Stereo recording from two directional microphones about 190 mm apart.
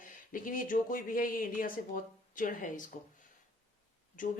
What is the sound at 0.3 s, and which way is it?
Speech, 45° left (ahead or behind).